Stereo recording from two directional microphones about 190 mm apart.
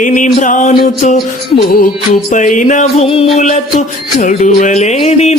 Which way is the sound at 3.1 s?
30° left (ahead or behind).